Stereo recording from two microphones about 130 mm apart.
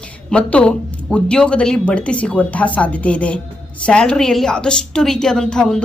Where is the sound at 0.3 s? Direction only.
10° left (ahead or behind).